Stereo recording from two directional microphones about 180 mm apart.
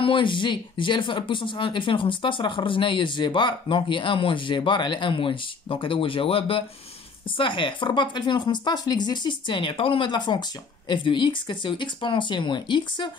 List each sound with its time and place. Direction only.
0.0 s speech: 30° left (ahead or behind)